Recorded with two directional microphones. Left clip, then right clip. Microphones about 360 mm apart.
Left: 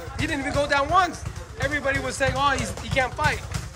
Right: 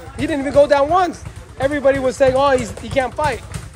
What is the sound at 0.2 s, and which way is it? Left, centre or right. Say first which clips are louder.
Speech: right 11 dB; centre.